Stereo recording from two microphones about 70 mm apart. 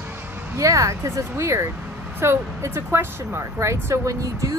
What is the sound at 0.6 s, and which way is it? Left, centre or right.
Speech, right.